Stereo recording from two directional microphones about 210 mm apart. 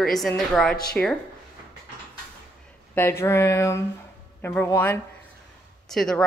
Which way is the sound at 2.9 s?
10° left (ahead or behind).